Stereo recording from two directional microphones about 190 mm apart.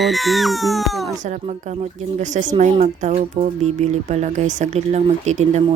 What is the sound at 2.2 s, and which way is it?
Speech, 40° right (ahead or behind).